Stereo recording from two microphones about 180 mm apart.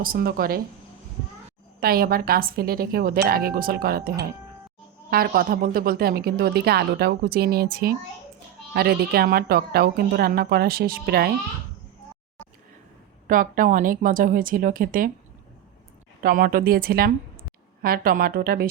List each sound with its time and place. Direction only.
0.0 s a woman's voice: 55° right (ahead or behind)
1.8 s a woman's voice: 55° right (ahead or behind)
5.1 s a woman's voice: 55° right (ahead or behind)
13.2 s speech: 50° right (ahead or behind)
16.2 s a woman's voice: 55° right (ahead or behind)